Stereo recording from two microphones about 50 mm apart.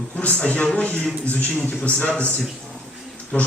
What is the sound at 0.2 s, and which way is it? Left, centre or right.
A man's voice, left.